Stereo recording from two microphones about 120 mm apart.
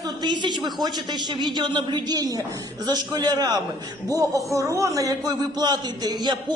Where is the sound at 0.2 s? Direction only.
40° right (ahead or behind).